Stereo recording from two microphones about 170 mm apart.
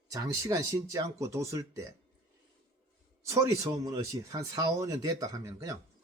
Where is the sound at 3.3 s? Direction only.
20° right (ahead or behind).